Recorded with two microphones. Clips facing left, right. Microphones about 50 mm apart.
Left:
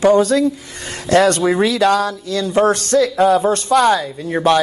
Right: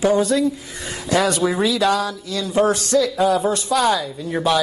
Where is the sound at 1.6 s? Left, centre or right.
Left.